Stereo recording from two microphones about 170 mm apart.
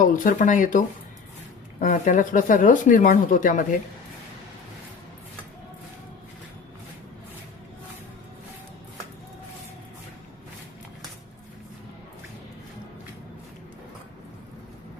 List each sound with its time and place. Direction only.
0.0 s speech: 50° left (ahead or behind)
1.8 s speech: 50° left (ahead or behind)